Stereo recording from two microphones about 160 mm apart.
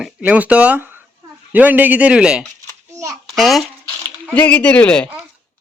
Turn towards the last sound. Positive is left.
turn(degrees=5)  # may be behind; listen again after turning